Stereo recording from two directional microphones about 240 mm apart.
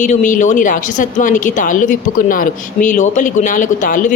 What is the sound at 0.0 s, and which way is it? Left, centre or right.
A woman's voice, left.